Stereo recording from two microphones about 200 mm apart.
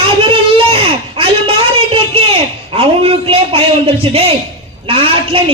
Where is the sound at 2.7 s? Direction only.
25° right (ahead or behind).